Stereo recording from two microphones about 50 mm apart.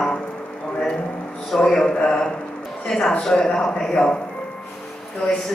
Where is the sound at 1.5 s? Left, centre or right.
Centre.